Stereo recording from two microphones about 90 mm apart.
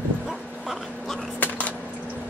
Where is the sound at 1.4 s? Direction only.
15° left (ahead or behind).